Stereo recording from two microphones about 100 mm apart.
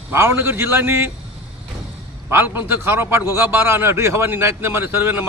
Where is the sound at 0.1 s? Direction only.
25° right (ahead or behind).